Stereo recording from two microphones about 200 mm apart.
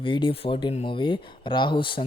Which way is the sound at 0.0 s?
25° left (ahead or behind).